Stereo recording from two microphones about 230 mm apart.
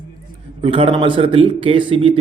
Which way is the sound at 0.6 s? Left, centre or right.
Right.